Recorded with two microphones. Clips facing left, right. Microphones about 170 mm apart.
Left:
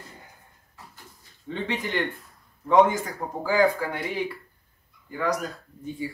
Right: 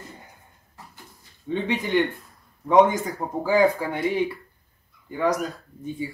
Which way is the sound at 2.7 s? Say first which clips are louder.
Right 2 dB; 20° right (ahead or behind).